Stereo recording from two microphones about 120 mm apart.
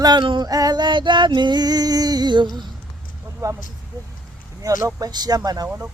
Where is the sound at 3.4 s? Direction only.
25° right (ahead or behind).